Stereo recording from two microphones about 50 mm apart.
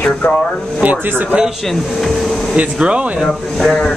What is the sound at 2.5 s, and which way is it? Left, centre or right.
Speech, right.